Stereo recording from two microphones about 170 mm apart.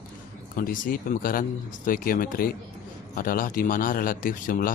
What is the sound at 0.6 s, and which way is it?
Speech, 55° left (ahead or behind).